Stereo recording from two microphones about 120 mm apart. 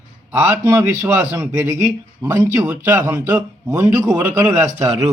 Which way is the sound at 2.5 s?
20° right (ahead or behind).